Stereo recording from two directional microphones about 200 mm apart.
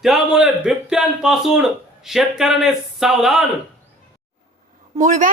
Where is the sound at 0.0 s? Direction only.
5° right (ahead or behind).